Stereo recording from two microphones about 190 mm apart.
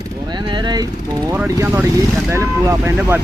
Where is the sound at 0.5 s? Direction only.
25° right (ahead or behind).